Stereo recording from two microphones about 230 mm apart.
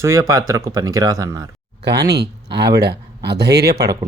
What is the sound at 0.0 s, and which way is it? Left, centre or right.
Speech, centre.